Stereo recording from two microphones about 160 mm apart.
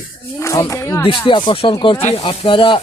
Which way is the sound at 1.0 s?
30° left (ahead or behind).